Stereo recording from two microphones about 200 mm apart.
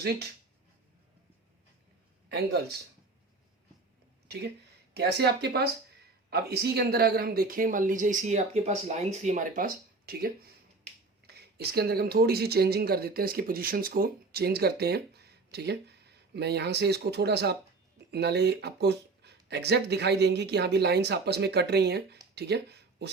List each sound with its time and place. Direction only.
2.3 s speech: 55° right (ahead or behind)
4.3 s speech: 55° right (ahead or behind)